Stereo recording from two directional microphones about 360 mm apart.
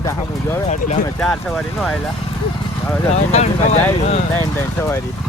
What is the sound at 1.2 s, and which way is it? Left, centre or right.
Speech, centre.